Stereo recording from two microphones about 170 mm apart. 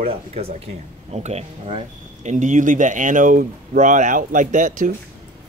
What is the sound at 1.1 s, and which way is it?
Speech, 40° right (ahead or behind).